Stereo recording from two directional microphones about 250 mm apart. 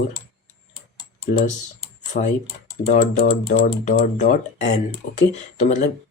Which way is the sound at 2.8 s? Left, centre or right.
Left.